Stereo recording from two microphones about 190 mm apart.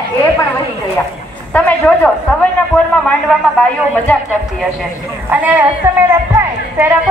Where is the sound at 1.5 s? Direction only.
10° left (ahead or behind).